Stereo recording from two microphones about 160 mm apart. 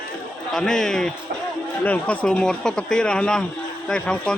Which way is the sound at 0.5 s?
5° left (ahead or behind).